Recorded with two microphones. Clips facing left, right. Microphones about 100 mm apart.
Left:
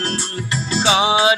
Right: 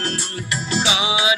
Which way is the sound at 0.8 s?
45° left (ahead or behind).